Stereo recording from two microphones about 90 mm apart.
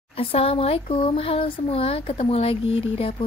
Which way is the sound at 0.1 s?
90° left.